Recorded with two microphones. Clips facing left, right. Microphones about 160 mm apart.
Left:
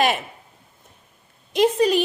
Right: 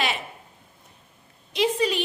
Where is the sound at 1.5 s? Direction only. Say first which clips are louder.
Left 6 dB; 45° left (ahead or behind).